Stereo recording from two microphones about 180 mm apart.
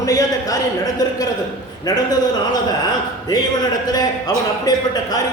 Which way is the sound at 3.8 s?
20° left (ahead or behind).